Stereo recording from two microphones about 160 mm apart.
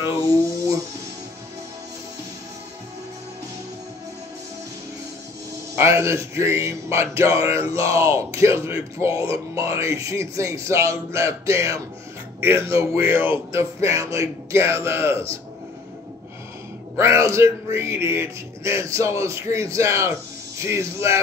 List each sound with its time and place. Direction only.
0.0 s music: 20° right (ahead or behind)
5.8 s speech: 15° right (ahead or behind)
16.9 s speech: 20° right (ahead or behind)